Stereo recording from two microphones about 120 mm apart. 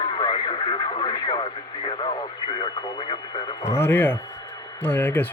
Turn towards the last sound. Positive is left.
turn(degrees=15)  # may be behind; listen again after turning